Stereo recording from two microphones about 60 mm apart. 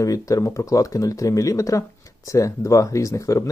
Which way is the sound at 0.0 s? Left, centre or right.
Left.